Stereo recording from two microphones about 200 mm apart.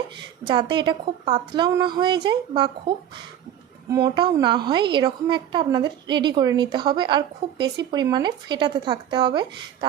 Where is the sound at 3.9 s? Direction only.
15° right (ahead or behind).